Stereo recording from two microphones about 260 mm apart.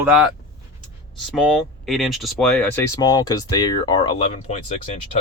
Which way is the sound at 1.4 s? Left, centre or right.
Centre.